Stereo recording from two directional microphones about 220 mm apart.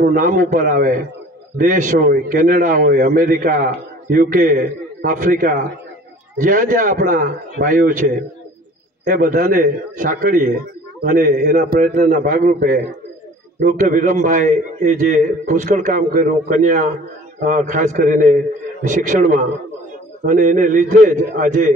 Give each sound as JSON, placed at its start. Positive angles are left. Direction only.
{"t": 0.0, "sound": "a man's voice", "side_deg": -35}
{"t": 9.0, "sound": "a man's voice", "side_deg": -40}